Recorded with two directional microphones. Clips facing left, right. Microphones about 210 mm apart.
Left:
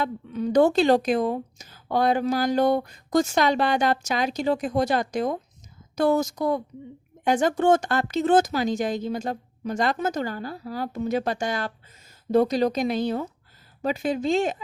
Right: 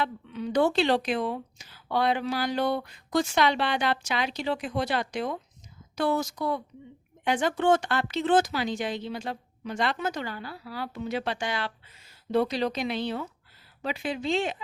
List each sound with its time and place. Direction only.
0.0 s speech: 45° left (ahead or behind)